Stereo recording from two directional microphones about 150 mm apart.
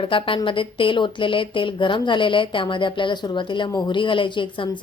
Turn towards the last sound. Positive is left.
turn(degrees=30)  # may be behind; listen again after turning